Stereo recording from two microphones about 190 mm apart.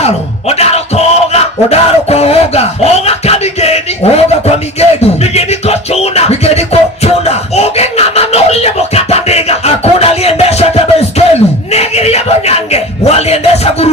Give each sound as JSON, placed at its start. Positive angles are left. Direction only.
{"t": 0.0, "sound": "music", "side_deg": 35}